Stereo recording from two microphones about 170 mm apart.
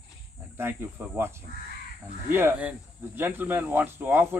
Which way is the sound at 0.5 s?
15° right (ahead or behind).